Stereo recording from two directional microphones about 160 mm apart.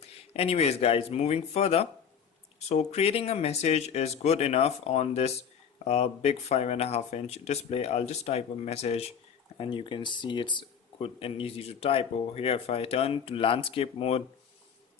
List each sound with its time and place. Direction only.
0.3 s speech: 40° left (ahead or behind)